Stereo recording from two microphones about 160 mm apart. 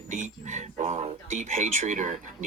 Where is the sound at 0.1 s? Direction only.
50° right (ahead or behind).